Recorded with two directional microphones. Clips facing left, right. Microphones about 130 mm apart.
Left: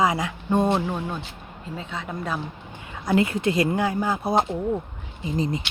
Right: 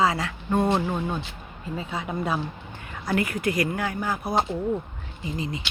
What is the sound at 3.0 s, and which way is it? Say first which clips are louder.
Speech: left 4 dB; 25° left (ahead or behind).